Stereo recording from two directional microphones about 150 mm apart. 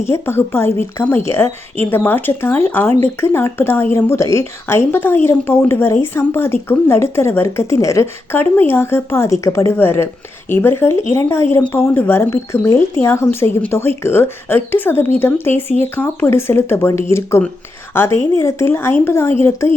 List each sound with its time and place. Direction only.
0.1 s speech: 15° left (ahead or behind)